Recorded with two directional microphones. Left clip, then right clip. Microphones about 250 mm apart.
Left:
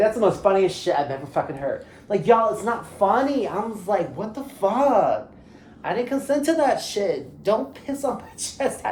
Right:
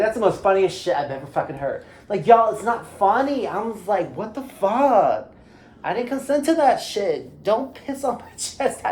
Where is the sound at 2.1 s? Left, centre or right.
Centre.